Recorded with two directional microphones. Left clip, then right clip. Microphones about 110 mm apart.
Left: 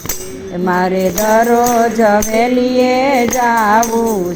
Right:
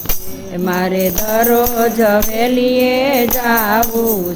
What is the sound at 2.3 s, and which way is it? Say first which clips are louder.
Music: left 1 dB; 30° right (ahead or behind).